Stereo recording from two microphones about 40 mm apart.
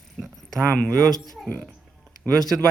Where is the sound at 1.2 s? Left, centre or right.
Centre.